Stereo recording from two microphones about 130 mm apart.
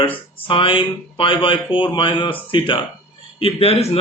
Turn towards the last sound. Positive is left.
turn(degrees=50)  # may be behind; listen again after turning